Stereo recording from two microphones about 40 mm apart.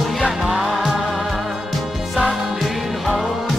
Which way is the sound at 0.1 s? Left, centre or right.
Centre.